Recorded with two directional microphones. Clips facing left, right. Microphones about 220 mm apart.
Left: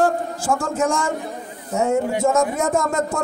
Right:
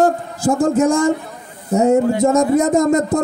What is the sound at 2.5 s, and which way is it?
Speech, 40° right (ahead or behind).